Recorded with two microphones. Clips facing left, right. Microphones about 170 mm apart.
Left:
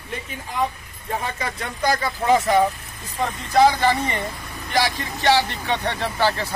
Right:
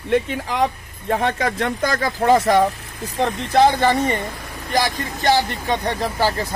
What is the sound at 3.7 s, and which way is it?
Speech, 50° right (ahead or behind).